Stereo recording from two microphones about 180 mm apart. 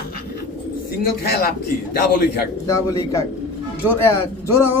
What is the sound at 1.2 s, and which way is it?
Speech, 60° left (ahead or behind).